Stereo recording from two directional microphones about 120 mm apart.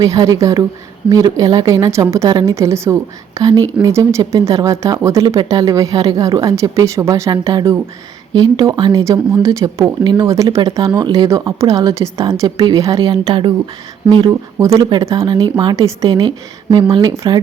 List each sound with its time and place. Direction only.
0.0 s speech: 30° right (ahead or behind)
10.2 s speech: 25° right (ahead or behind)
13.2 s speech: 50° right (ahead or behind)
14.6 s speech: 25° right (ahead or behind)
15.7 s speech: 25° right (ahead or behind)
16.0 s speech: 40° right (ahead or behind)